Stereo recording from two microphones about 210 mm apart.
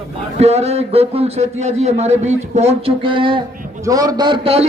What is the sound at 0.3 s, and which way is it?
A man's voice, 30° right (ahead or behind).